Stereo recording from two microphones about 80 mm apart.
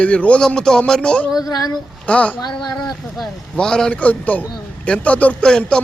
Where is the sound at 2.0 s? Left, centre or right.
Centre.